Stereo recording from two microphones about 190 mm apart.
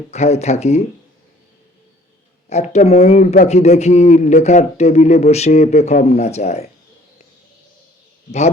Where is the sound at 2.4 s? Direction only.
35° left (ahead or behind).